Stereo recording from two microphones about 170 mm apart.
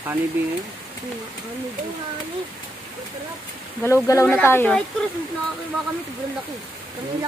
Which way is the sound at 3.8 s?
15° left (ahead or behind).